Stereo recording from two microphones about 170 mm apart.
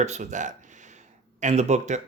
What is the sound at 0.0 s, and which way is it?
Speech, 45° right (ahead or behind).